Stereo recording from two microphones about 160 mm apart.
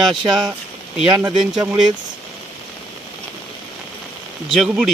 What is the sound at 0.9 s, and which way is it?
Speech, 5° right (ahead or behind).